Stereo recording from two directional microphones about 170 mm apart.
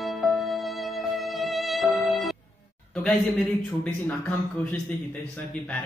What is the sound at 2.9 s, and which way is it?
Speech, centre (ahead or behind).